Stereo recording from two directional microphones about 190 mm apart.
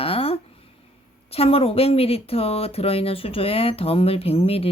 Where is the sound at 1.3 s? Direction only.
30° left (ahead or behind).